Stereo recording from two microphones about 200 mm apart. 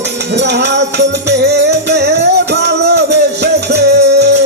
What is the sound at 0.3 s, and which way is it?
Music, 60° right (ahead or behind).